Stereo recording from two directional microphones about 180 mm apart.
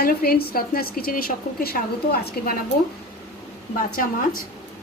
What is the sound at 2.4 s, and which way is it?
Speech, 55° left (ahead or behind).